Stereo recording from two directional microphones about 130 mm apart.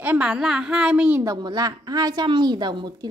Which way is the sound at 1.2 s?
30° right (ahead or behind).